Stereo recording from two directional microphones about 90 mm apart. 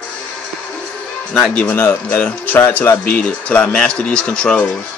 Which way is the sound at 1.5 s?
15° left (ahead or behind).